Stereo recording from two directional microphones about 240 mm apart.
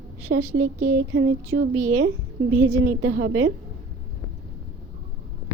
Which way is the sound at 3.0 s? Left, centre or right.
Right.